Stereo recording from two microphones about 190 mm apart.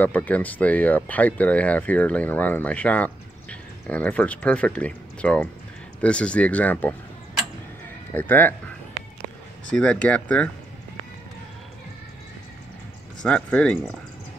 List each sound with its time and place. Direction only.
0.0 s speech: 10° left (ahead or behind)
8.1 s speech: 10° left (ahead or behind)
9.7 s speech: 5° left (ahead or behind)
13.2 s speech: 5° left (ahead or behind)